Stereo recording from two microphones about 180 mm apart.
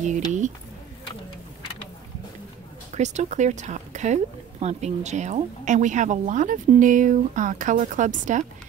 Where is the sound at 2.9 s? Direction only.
40° right (ahead or behind).